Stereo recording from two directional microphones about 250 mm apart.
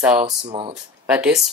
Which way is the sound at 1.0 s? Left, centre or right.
Centre.